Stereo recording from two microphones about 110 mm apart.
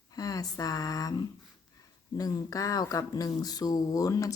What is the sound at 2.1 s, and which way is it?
A woman's voice, 35° left (ahead or behind).